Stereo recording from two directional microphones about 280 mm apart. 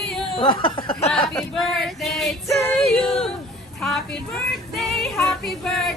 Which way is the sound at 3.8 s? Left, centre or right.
Centre.